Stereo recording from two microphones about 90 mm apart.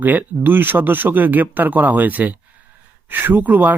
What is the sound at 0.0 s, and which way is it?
Speech, 20° right (ahead or behind).